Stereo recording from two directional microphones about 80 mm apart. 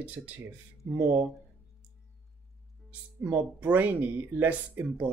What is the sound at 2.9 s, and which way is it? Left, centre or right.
Speech, centre.